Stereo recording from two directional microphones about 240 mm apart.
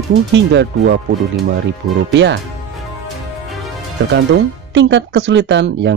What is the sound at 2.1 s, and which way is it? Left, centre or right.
Speech, right.